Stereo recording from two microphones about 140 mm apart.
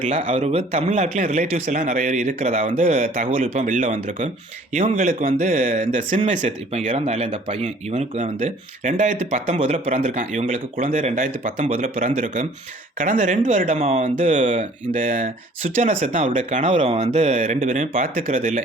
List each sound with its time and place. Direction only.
0.0 s a man's voice: 55° right (ahead or behind)
3.4 s a man's voice: 60° right (ahead or behind)
7.3 s speech: 40° right (ahead or behind)
7.6 s speech: 50° right (ahead or behind)
9.6 s a man's voice: 40° right (ahead or behind); by 13.7 s 65° right (ahead or behind)
13.7 s a man's voice: 50° right (ahead or behind); by 15.3 s 70° right (ahead or behind)
15.8 s a man's voice: 55° right (ahead or behind)
16.7 s a man's voice: 45° right (ahead or behind); by 18.6 s 65° right (ahead or behind)